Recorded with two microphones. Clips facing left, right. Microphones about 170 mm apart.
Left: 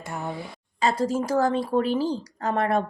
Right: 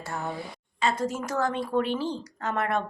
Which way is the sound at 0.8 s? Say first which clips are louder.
Left 4 dB; 35° left (ahead or behind).